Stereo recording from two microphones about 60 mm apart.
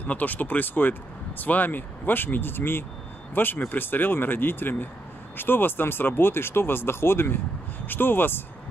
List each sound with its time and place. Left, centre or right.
0.0 s speech: left